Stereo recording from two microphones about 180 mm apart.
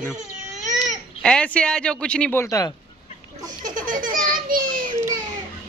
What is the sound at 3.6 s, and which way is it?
Baby laughter, 50° right (ahead or behind).